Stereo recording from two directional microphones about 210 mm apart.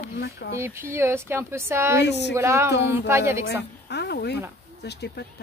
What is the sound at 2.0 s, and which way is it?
Speech, 55° left (ahead or behind).